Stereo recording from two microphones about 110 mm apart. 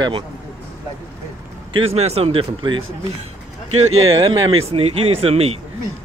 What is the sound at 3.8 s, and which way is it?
Speech, 65° right (ahead or behind).